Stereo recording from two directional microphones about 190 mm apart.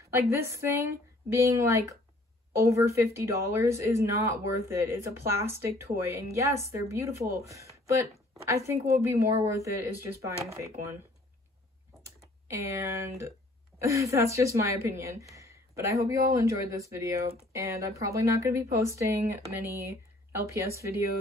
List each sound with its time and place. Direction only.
0.1 s speech: 15° right (ahead or behind)
7.7 s a sound: 15° right (ahead or behind)
8.5 s speech: 15° right (ahead or behind)
12.0 s typing: 15° right (ahead or behind)
13.7 s speech: 15° right (ahead or behind)